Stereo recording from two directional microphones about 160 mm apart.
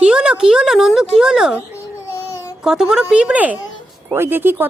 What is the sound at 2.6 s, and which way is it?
A woman's voice, 5° right (ahead or behind).